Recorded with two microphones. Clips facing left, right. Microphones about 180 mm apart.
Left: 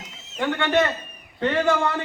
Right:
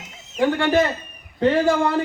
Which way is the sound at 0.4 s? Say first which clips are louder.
Right 3 dB; 35° right (ahead or behind).